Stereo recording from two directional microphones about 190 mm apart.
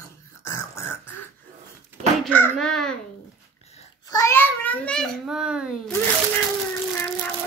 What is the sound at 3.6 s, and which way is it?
Babbling, 35° left (ahead or behind).